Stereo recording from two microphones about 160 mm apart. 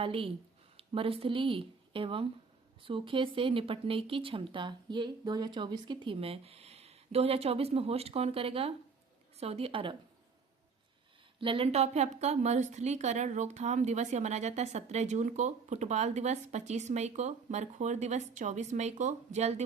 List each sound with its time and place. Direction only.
0.0 s speech: 35° right (ahead or behind)
11.3 s a woman's voice: 35° right (ahead or behind)